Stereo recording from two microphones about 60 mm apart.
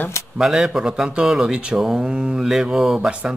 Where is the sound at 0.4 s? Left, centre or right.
Centre.